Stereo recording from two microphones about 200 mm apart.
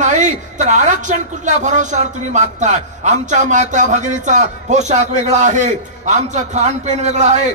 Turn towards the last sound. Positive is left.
turn(degrees=-35)  # may be behind; listen again after turning